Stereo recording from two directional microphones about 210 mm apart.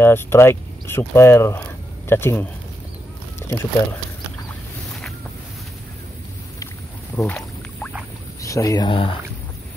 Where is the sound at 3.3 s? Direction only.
10° left (ahead or behind).